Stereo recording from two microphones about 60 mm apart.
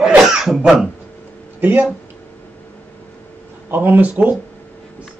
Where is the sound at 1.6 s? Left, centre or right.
Right.